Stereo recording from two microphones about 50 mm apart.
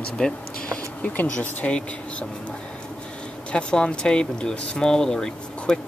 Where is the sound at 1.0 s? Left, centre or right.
Left.